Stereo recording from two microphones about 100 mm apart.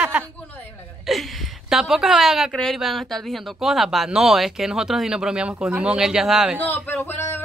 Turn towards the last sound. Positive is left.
turn(degrees=25)  # may be behind; listen again after turning